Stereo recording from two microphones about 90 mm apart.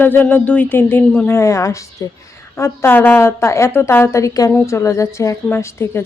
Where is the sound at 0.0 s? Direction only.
20° left (ahead or behind).